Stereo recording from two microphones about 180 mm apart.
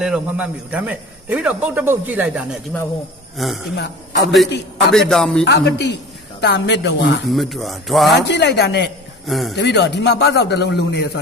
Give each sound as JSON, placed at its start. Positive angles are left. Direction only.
{"t": 0.0, "sound": "a man's voice", "side_deg": -5}
{"t": 3.8, "sound": "a man's voice", "side_deg": 75}
{"t": 4.9, "sound": "speech", "side_deg": 5}
{"t": 5.5, "sound": "a man's voice", "side_deg": 75}
{"t": 7.3, "sound": "speech", "side_deg": 0}
{"t": 8.3, "sound": "a man's voice", "side_deg": 70}
{"t": 9.2, "sound": "speech", "side_deg": 0}
{"t": 9.6, "sound": "a man's voice", "side_deg": 75}